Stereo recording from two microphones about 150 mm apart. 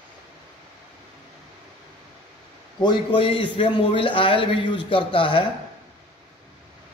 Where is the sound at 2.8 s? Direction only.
35° left (ahead or behind).